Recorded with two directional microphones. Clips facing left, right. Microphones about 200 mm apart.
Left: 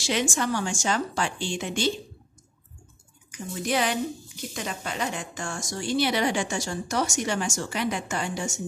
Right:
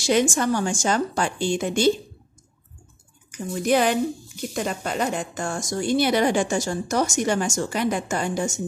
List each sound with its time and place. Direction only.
0.0 s a woman's voice: 45° right (ahead or behind)
3.6 s a woman's voice: 50° right (ahead or behind)